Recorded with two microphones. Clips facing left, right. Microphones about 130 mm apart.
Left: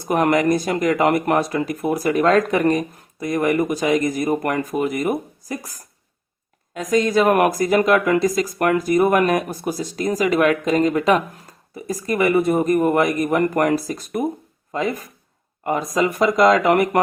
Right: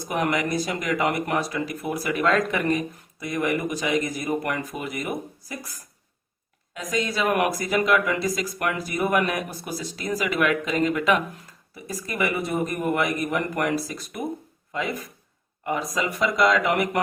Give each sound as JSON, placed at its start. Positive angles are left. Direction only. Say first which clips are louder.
{"t": 0.0, "sound": "speech", "louder": "left 7 dB", "side_deg": 50}